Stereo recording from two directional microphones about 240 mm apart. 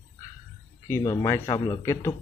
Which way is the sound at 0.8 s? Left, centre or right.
Centre.